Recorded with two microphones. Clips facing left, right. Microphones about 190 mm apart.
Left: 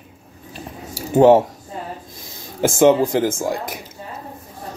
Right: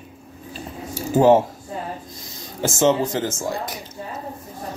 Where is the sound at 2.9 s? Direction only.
15° left (ahead or behind).